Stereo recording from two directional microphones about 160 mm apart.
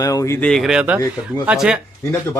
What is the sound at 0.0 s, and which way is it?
Speech, 20° left (ahead or behind).